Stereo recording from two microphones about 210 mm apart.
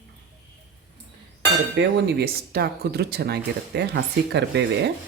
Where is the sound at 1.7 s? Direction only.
55° right (ahead or behind).